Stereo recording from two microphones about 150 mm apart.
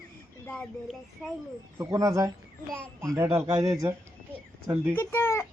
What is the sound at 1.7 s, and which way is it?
Speech, 20° right (ahead or behind).